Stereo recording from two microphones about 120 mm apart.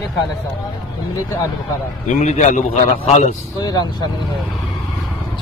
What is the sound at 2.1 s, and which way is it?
A man's voice, 65° left (ahead or behind).